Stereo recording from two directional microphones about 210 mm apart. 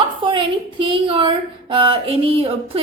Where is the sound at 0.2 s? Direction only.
25° right (ahead or behind).